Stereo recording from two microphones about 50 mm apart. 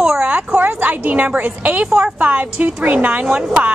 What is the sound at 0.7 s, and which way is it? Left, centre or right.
A woman's voice, right.